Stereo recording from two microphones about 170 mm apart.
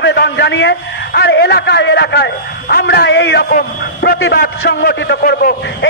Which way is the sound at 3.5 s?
70° left (ahead or behind).